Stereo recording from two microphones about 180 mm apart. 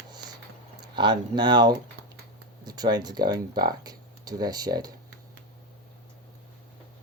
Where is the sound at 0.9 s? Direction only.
25° right (ahead or behind).